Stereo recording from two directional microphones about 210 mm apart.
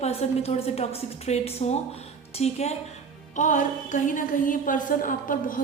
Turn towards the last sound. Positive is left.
turn(degrees=40)  # may be behind; listen again after turning